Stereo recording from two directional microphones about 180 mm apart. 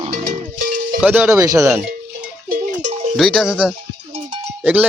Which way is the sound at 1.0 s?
10° right (ahead or behind).